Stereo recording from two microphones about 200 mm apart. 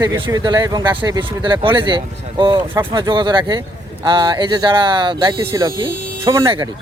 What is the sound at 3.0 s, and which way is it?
Speech, 25° right (ahead or behind).